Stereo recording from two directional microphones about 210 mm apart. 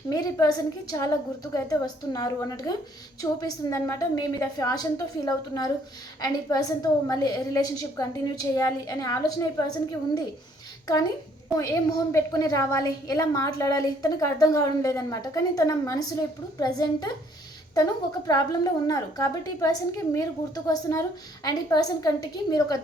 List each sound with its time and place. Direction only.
0.1 s a woman's voice: 15° left (ahead or behind)
11.4 s a woman's voice: 15° left (ahead or behind)
18.3 s a woman's voice: 15° left (ahead or behind)